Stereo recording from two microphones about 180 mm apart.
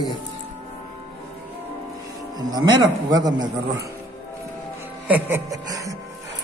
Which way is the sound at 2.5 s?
20° right (ahead or behind).